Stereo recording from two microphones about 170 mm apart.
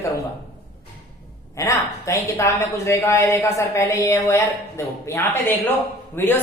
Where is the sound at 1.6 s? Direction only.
20° left (ahead or behind).